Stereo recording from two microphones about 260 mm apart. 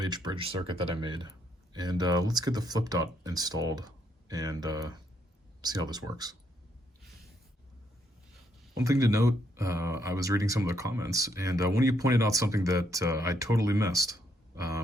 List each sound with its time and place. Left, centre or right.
0.0 s speech: centre
8.7 s speech: centre